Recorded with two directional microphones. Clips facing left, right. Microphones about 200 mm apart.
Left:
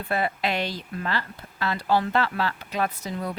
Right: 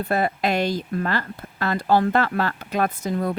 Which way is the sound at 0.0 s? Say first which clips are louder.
Right 4 dB; 45° right (ahead or behind).